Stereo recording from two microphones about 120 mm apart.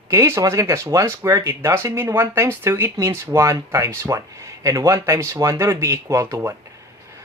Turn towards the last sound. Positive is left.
turn(degrees=-20)  # may be behind; listen again after turning